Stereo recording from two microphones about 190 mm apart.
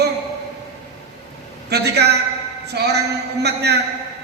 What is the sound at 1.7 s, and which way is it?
A man's voice, 60° right (ahead or behind).